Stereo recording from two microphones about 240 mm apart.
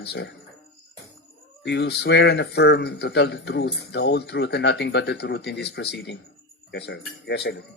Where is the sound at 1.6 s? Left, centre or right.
Left.